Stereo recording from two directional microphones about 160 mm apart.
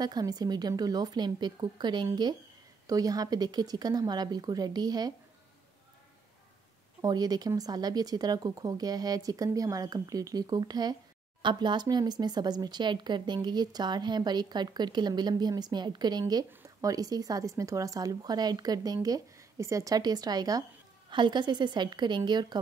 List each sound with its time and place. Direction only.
0.0 s speech: 25° right (ahead or behind)
7.0 s speech: 25° right (ahead or behind)